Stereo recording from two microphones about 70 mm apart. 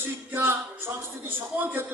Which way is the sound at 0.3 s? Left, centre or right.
Right.